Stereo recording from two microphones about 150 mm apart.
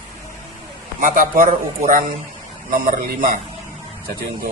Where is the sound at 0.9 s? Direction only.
60° right (ahead or behind).